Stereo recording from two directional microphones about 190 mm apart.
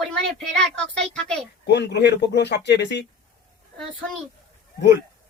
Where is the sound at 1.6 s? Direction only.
65° left (ahead or behind).